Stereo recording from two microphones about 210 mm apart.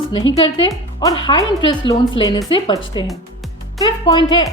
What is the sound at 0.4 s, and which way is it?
Speech, 25° left (ahead or behind).